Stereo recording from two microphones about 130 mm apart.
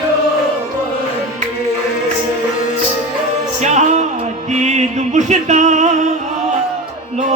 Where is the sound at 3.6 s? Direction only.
65° right (ahead or behind).